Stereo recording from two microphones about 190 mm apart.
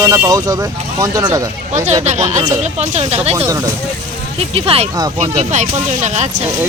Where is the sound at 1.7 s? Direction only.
35° right (ahead or behind).